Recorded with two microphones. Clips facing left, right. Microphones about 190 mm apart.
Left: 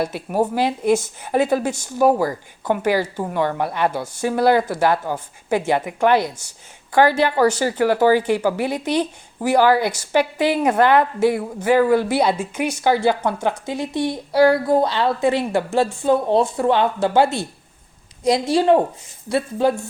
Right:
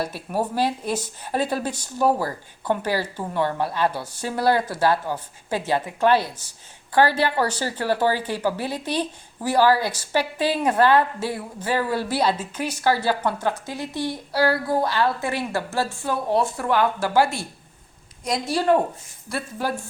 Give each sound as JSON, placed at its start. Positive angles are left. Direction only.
{"t": 0.3, "sound": "a woman's voice", "side_deg": 15}